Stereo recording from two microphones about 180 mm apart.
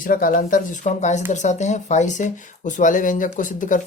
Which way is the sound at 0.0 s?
50° left (ahead or behind).